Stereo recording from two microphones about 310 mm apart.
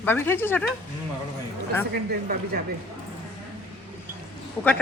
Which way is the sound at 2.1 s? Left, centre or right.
Right.